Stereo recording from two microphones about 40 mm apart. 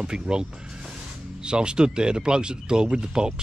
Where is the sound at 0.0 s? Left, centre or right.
Right.